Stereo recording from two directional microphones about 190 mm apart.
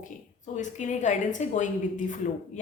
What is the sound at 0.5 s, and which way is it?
A woman's voice, 40° left (ahead or behind).